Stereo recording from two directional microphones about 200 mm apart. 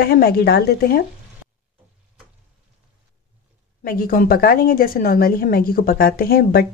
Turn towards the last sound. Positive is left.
turn(degrees=50)  # may be behind; listen again after turning